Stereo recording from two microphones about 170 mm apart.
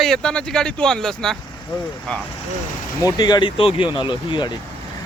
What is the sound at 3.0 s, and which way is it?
Speech, 25° left (ahead or behind).